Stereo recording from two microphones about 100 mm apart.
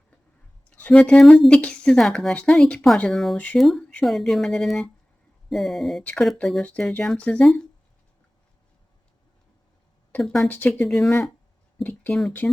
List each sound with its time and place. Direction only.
0.7 s speech: 10° left (ahead or behind)
3.3 s speech: 15° left (ahead or behind)
3.6 s speech: centre (ahead or behind)
6.0 s speech: 15° left (ahead or behind)
6.2 s speech: centre (ahead or behind)
6.7 s speech: 15° left (ahead or behind)
10.2 s speech: 5° left (ahead or behind)
10.5 s speech: 15° left (ahead or behind)
10.8 s speech: 5° left (ahead or behind)
11.8 s speech: 15° left (ahead or behind)